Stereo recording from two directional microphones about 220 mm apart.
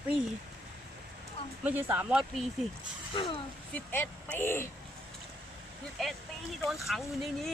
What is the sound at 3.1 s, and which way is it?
Speech, 20° left (ahead or behind).